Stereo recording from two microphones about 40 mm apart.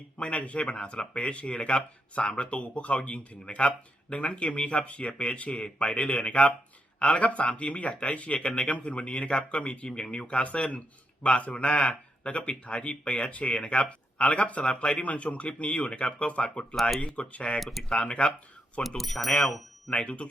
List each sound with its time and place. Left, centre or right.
0.2 s speech: left
17.6 s speech: centre
17.8 s speech: left
18.8 s speech: centre
19.9 s speech: left